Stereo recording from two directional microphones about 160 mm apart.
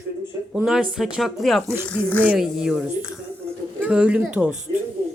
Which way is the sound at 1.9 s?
10° left (ahead or behind).